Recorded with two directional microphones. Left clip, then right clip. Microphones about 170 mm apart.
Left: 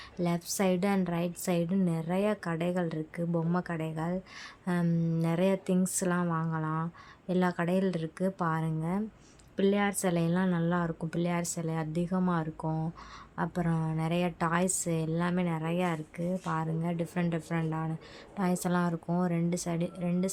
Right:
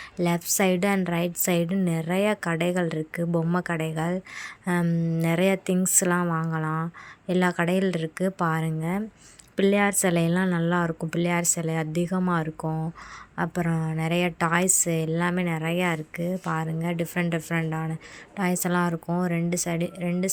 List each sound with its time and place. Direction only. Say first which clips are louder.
0.2 s a woman's voice: right 7 dB; 20° right (ahead or behind)